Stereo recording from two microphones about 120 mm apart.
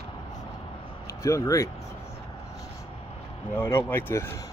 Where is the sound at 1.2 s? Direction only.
25° left (ahead or behind).